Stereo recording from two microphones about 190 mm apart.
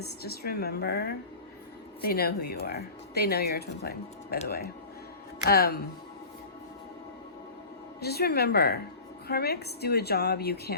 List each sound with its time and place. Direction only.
0.0 s speech: 55° left (ahead or behind)
5.5 s speech: 55° left (ahead or behind)
8.0 s speech: 55° left (ahead or behind)